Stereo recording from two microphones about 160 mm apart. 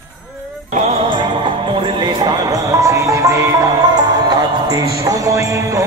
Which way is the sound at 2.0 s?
25° right (ahead or behind).